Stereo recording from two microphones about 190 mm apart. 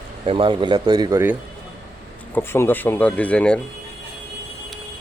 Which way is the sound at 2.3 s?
10° left (ahead or behind).